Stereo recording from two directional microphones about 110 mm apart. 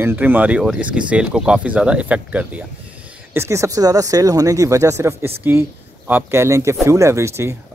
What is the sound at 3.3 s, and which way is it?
Speech, 25° right (ahead or behind).